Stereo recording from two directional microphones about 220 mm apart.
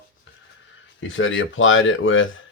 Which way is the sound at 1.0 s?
60° left (ahead or behind).